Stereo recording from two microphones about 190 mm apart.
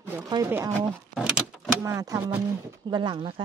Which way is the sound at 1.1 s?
5° right (ahead or behind).